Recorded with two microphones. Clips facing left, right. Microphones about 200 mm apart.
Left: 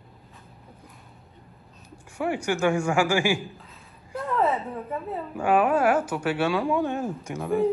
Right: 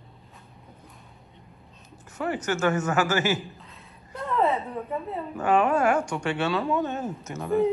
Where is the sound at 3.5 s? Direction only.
Centre (ahead or behind).